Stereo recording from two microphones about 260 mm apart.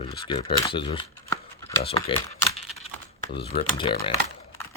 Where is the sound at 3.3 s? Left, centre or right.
Left.